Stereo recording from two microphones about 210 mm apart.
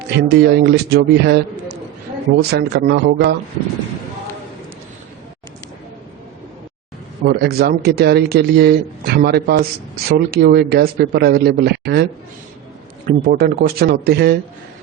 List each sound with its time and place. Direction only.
0.2 s speech: 50° right (ahead or behind)
7.3 s speech: 50° right (ahead or behind)
13.1 s speech: 45° right (ahead or behind)